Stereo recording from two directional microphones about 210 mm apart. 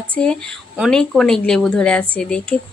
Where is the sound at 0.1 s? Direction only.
5° left (ahead or behind).